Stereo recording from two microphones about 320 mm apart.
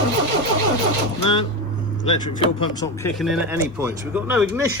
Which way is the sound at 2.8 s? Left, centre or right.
Centre.